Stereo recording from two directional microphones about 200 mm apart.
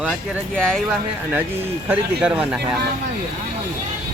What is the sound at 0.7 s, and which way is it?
Speech, centre (ahead or behind).